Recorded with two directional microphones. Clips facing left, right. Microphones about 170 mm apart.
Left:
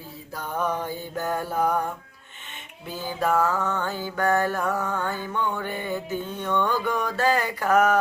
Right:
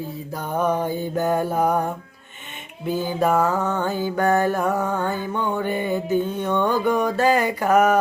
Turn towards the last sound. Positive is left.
turn(degrees=-15)  # may be behind; listen again after turning